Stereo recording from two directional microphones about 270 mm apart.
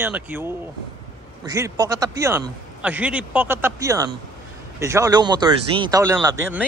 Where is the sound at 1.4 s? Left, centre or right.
Centre.